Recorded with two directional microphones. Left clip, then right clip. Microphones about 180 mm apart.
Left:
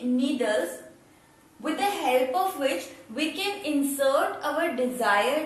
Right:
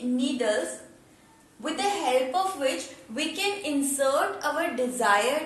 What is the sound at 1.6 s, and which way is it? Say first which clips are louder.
A woman's voice: even; 15° right (ahead or behind).